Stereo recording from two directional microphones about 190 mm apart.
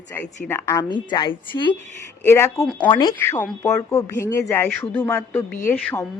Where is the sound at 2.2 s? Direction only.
15° left (ahead or behind).